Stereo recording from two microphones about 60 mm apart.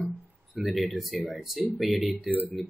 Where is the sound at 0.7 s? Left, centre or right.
Centre.